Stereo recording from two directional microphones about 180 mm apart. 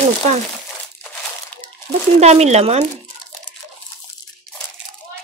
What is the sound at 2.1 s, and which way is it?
Speech, 35° right (ahead or behind).